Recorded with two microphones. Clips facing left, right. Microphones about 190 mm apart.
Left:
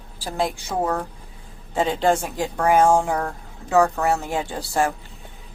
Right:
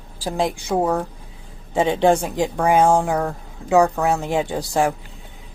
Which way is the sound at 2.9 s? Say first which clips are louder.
Right 2 dB; 10° right (ahead or behind).